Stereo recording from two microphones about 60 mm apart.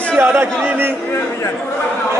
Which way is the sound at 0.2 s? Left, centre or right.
Right.